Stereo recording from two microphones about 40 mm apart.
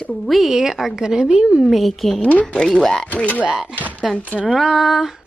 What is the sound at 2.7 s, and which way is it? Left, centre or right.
Speech, left.